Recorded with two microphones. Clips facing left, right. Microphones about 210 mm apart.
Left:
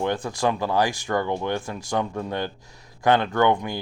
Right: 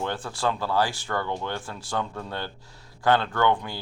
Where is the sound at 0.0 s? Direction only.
15° left (ahead or behind).